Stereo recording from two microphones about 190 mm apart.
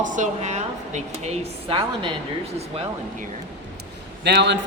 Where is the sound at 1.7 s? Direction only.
25° right (ahead or behind).